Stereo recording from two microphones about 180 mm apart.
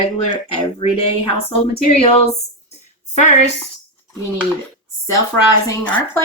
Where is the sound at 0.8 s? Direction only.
30° left (ahead or behind).